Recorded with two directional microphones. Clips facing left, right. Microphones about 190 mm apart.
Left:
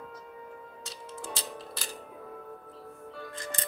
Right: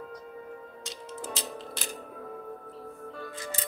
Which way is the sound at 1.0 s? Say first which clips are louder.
Right 2 dB; 20° right (ahead or behind).